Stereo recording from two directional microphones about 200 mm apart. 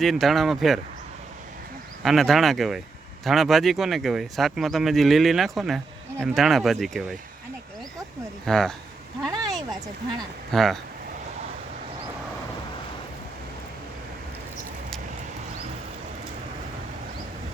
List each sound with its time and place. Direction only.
0.0 s speech: centre (ahead or behind)
2.0 s speech: centre (ahead or behind)
8.4 s speech: centre (ahead or behind)
9.3 s a sound: 20° right (ahead or behind)
10.5 s speech: centre (ahead or behind)